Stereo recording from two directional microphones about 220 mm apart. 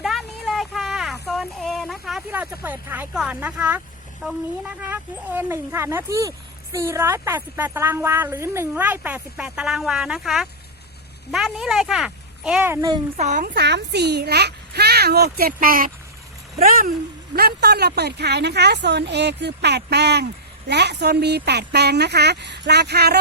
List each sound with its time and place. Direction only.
0.0 s a sound: centre (ahead or behind)
4.2 s a child's voice: 5° right (ahead or behind)
13.1 s a woman's voice: 35° right (ahead or behind)